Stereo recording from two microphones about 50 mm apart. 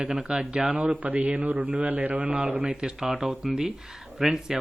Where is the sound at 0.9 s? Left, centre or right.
Right.